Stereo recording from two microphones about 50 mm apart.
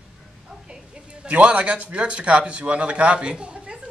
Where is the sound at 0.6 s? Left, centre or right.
Centre.